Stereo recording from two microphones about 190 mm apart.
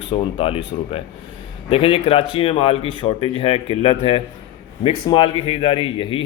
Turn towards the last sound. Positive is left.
turn(degrees=30)  # may be behind; listen again after turning